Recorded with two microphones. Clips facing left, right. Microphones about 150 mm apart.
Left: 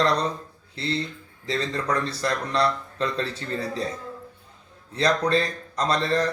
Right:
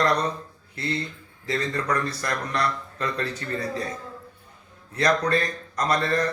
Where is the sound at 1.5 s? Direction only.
30° left (ahead or behind).